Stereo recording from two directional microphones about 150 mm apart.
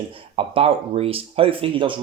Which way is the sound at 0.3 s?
40° right (ahead or behind).